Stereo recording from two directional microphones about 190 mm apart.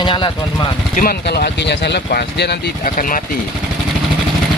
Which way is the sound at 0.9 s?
50° left (ahead or behind).